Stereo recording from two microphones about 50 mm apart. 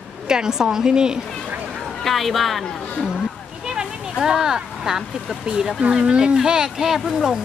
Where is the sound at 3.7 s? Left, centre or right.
Centre.